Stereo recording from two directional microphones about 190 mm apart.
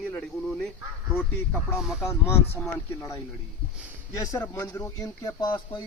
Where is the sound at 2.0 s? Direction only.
15° left (ahead or behind).